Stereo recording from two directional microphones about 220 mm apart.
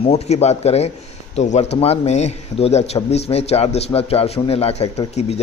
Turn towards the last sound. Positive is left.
turn(degrees=30)  # may be behind; listen again after turning